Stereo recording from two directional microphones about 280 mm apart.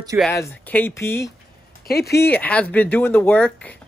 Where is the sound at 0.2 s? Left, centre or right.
Centre.